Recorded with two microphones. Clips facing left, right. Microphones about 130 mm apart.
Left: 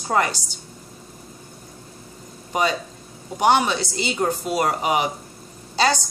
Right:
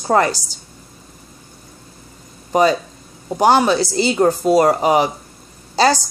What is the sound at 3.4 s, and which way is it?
Speech, 35° right (ahead or behind).